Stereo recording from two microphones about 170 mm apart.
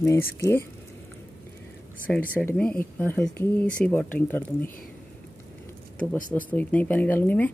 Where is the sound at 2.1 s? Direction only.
10° left (ahead or behind).